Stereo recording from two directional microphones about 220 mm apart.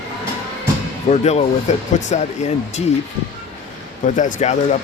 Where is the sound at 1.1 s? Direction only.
30° left (ahead or behind).